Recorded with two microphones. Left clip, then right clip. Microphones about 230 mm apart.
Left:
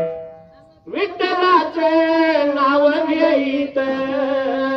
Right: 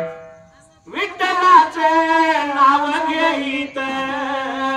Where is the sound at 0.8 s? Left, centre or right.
Right.